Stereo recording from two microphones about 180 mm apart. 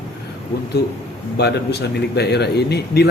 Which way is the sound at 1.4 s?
65° left (ahead or behind).